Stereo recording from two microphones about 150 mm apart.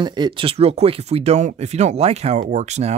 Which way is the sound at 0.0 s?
30° right (ahead or behind).